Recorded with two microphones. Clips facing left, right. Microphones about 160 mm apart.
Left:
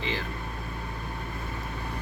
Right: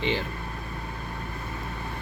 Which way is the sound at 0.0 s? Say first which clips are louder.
Right 5 dB; 30° right (ahead or behind).